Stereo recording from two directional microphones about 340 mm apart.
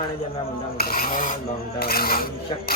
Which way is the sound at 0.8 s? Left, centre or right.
Left.